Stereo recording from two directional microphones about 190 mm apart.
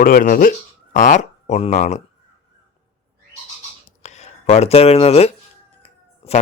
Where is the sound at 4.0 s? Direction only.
35° left (ahead or behind).